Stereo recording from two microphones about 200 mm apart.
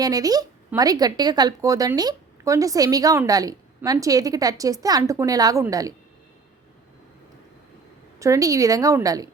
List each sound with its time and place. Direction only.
0.0 s speech: 20° right (ahead or behind)
8.2 s speech: 15° right (ahead or behind)